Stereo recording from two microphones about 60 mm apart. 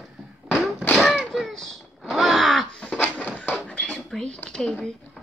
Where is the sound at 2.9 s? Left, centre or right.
Left.